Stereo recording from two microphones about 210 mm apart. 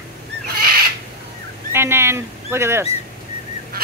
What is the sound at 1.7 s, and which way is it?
Speech, 10° right (ahead or behind).